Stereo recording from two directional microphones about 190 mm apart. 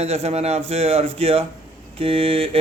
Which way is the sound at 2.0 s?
30° right (ahead or behind).